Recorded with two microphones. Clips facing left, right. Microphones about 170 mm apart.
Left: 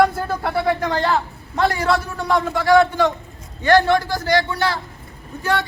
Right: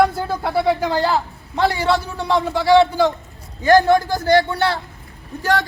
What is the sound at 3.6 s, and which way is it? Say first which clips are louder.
Speech: right 2 dB; 40° right (ahead or behind).